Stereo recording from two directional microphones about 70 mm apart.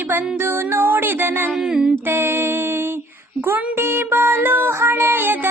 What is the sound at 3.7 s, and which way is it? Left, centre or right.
Music, right.